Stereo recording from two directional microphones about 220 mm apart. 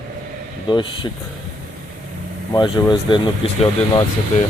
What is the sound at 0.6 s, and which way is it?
Speech, 20° left (ahead or behind).